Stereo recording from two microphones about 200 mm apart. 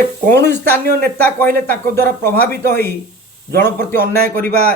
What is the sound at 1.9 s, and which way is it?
Speech, 10° left (ahead or behind).